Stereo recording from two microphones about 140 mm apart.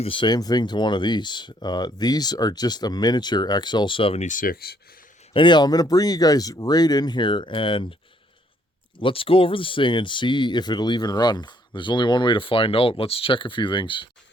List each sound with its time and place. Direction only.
0.0 s speech: 35° left (ahead or behind)
4.3 s speech: 80° left
5.3 s speech: 35° left (ahead or behind)
9.0 s speech: 40° left (ahead or behind)